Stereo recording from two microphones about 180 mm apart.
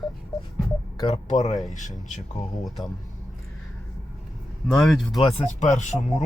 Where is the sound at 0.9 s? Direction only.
25° left (ahead or behind).